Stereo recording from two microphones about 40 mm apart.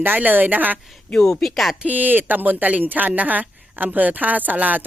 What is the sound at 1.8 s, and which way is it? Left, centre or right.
Speech, right.